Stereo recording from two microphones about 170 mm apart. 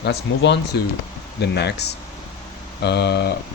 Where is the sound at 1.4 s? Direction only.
75° left (ahead or behind).